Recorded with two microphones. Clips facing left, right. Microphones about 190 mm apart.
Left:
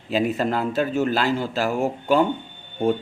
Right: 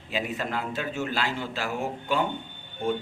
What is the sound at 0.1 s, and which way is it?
A man's voice, 40° left (ahead or behind).